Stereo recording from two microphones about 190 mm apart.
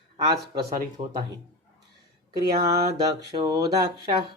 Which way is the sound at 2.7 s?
55° right (ahead or behind).